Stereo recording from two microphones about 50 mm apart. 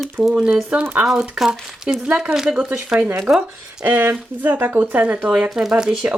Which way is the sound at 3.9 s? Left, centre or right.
Right.